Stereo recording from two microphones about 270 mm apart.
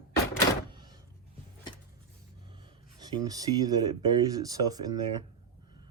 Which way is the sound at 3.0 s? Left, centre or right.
Centre.